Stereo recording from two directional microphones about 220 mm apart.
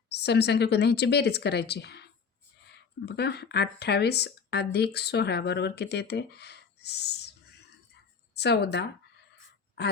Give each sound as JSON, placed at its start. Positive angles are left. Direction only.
{"t": 0.1, "sound": "speech", "side_deg": 50}
{"t": 3.1, "sound": "speech", "side_deg": 50}
{"t": 8.4, "sound": "speech", "side_deg": 50}